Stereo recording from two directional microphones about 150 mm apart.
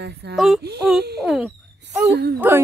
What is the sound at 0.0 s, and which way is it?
Speech, 90° right.